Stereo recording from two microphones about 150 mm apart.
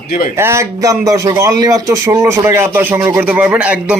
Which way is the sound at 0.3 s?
20° right (ahead or behind).